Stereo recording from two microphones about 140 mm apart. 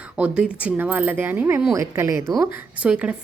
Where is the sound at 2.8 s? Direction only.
10° right (ahead or behind).